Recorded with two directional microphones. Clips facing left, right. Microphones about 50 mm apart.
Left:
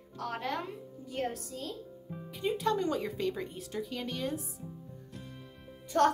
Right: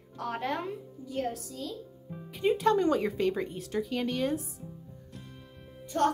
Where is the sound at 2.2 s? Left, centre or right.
Right.